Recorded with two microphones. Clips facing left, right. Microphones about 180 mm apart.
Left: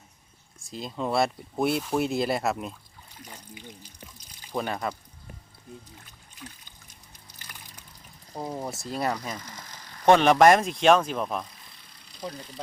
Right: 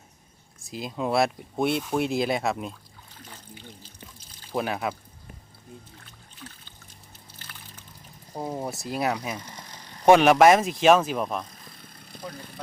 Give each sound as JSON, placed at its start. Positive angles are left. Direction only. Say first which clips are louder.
{"t": 0.6, "sound": "speech", "louder": "right 2 dB", "side_deg": -5}
{"t": 3.2, "sound": "water", "louder": "left 1 dB", "side_deg": 10}
{"t": 4.5, "sound": "speech", "louder": "right 2 dB", "side_deg": -5}
{"t": 6.1, "sound": "boat", "louder": "even", "side_deg": 15}
{"t": 7.3, "sound": "a sound", "louder": "even", "side_deg": 10}
{"t": 8.3, "sound": "speech", "louder": "right 2 dB", "side_deg": -10}
{"t": 9.4, "sound": "vehicle", "louder": "right 1 dB", "side_deg": -30}
{"t": 10.1, "sound": "speech", "louder": "right 2 dB", "side_deg": -10}
{"t": 11.5, "sound": "vehicle", "louder": "right 6 dB", "side_deg": -50}